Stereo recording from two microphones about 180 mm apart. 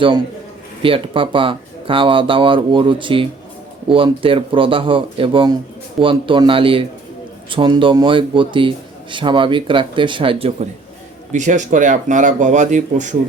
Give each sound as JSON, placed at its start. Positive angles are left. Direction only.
{"t": 0.8, "sound": "speech", "side_deg": -30}
{"t": 11.3, "sound": "speech", "side_deg": -45}